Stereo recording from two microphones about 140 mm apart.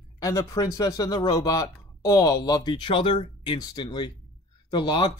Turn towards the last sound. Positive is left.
turn(degrees=35)  # may be behind; listen again after turning